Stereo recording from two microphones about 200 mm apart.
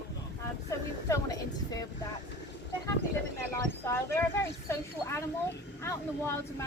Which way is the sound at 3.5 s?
15° left (ahead or behind).